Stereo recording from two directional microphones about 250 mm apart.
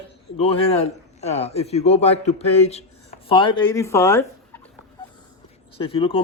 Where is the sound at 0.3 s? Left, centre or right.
Left.